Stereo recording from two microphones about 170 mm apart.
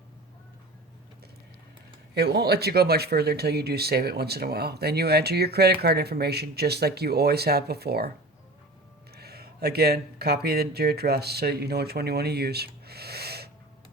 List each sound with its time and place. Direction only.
2.1 s speech: 70° right (ahead or behind)
9.1 s speech: 70° right (ahead or behind)